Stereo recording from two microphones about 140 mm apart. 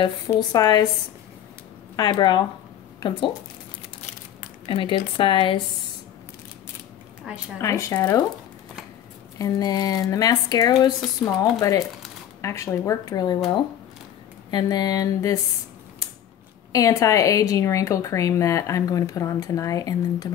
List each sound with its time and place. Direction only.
0.4 s a woman's voice: 30° left (ahead or behind)
2.0 s speech: 30° left (ahead or behind)
4.6 s speech: 35° left (ahead or behind)
7.3 s a woman's voice: 5° right (ahead or behind)
7.6 s a woman's voice: 20° left (ahead or behind)
9.4 s a woman's voice: 25° left (ahead or behind)
14.5 s a woman's voice: 30° left (ahead or behind)
16.7 s a woman's voice: 25° left (ahead or behind)